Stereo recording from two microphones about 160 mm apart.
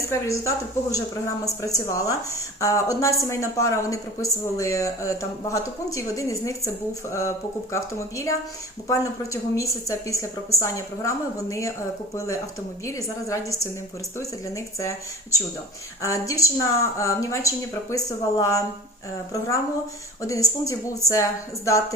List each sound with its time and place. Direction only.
0.1 s speech: 20° left (ahead or behind)
12.8 s speech: 20° left (ahead or behind)
20.2 s speech: 20° left (ahead or behind)